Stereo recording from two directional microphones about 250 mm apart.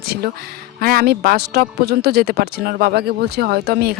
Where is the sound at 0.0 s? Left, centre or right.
Right.